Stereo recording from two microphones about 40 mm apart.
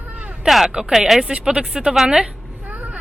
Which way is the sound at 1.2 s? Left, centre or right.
Right.